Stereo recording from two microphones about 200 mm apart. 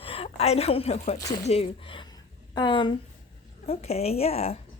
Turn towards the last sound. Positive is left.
turn(degrees=30)  # may be behind; listen again after turning